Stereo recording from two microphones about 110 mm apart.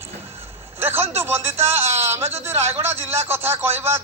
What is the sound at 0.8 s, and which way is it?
A man's voice, 20° right (ahead or behind).